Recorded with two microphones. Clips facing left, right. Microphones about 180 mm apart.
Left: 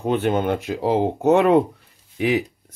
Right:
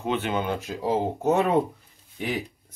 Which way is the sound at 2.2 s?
80° left.